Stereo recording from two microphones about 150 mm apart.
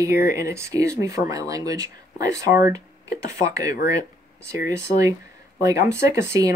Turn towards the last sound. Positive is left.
turn(degrees=-20)  # may be behind; listen again after turning